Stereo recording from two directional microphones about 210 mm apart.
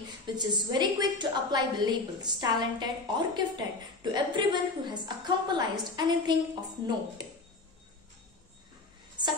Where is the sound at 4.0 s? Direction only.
20° right (ahead or behind).